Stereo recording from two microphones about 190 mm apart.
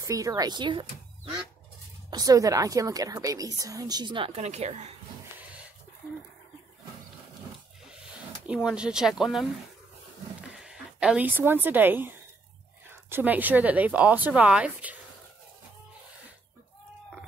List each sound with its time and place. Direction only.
0.0 s a woman's voice: 15° right (ahead or behind)
4.4 s speech: 35° right (ahead or behind)
8.6 s speech: 5° right (ahead or behind)